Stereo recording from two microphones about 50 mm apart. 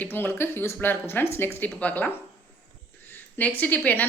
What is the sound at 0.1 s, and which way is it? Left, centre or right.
Speech, left.